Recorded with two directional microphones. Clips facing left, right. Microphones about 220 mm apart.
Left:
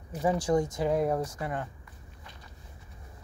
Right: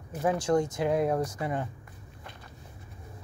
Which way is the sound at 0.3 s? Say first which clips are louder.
Right 1 dB; 15° left (ahead or behind).